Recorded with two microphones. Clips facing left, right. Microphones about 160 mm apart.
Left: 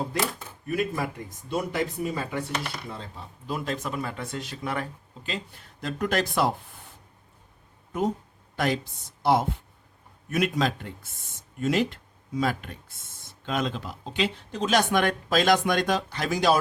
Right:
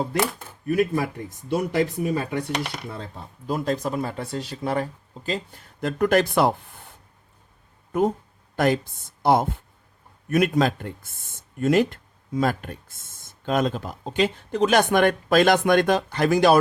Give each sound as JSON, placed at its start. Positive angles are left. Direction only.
{"t": 0.3, "sound": "speech", "side_deg": -60}
{"t": 3.4, "sound": "speech", "side_deg": -40}
{"t": 5.8, "sound": "speech", "side_deg": -55}
{"t": 8.5, "sound": "a woman's voice", "side_deg": -50}